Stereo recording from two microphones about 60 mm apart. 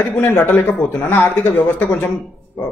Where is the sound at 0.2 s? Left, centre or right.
Left.